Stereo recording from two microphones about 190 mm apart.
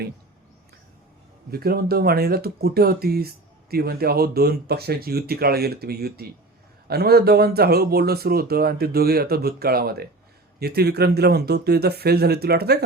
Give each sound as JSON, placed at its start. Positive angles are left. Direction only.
{"t": 1.5, "sound": "speech", "side_deg": -55}